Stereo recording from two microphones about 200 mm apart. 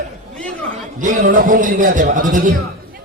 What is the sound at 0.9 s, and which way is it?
A man's voice, 40° right (ahead or behind).